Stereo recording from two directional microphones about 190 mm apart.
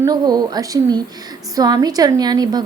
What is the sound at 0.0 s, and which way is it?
A woman's voice, 20° right (ahead or behind).